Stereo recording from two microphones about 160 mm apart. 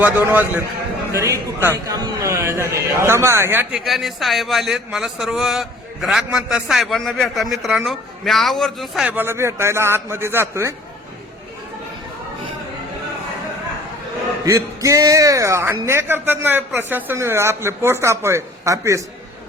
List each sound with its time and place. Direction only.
0.0 s a man's voice: 10° right (ahead or behind)
14.4 s a man's voice: 20° right (ahead or behind)